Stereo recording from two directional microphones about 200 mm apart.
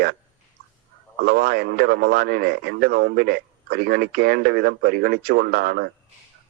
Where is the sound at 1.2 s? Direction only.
50° right (ahead or behind).